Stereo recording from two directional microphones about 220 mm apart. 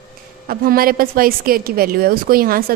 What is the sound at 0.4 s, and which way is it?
A woman's voice, 40° right (ahead or behind).